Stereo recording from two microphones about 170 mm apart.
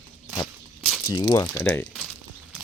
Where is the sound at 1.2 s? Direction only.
15° left (ahead or behind).